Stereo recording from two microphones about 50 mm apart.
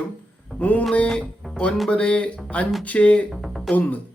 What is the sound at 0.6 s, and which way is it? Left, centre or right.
Speech, left.